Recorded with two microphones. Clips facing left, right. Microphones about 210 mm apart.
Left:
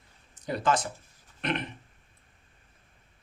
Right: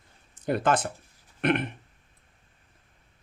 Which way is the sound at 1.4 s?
55° right (ahead or behind).